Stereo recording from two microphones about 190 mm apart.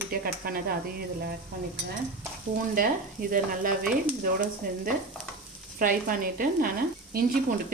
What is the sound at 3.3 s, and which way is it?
Speech, 45° right (ahead or behind).